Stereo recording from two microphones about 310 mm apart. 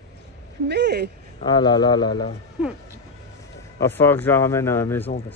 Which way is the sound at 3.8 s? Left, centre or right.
Centre.